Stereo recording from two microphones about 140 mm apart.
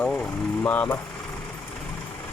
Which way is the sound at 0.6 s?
10° left (ahead or behind).